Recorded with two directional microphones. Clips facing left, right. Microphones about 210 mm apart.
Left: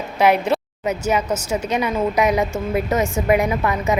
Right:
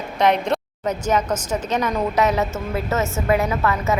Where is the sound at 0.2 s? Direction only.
5° left (ahead or behind).